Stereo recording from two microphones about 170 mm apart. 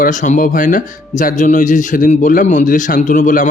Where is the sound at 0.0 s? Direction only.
50° left (ahead or behind).